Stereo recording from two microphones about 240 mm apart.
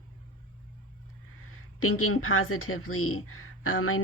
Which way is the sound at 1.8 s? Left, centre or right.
Left.